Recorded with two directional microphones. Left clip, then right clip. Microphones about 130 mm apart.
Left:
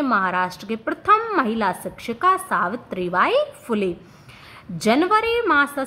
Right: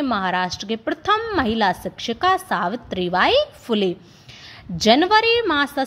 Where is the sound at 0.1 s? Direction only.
30° right (ahead or behind).